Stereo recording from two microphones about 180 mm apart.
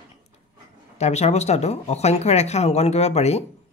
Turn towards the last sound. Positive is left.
turn(degrees=35)  # may be behind; listen again after turning